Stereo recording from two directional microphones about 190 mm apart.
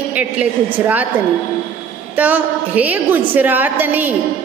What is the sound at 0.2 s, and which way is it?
Speech, 10° right (ahead or behind).